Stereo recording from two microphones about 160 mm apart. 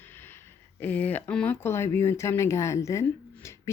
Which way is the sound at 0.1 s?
15° left (ahead or behind).